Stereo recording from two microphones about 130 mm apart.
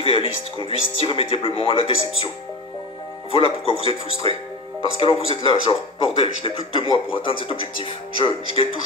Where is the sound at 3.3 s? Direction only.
45° left (ahead or behind).